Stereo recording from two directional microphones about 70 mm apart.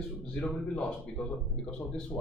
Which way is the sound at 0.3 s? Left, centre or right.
Centre.